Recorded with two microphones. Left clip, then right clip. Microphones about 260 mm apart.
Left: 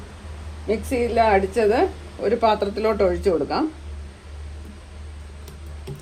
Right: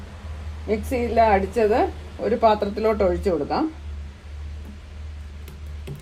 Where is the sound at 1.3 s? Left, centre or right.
Left.